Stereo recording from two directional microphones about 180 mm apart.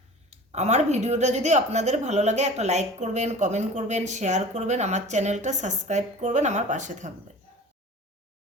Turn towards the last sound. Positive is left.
turn(degrees=-40)  # may be behind; listen again after turning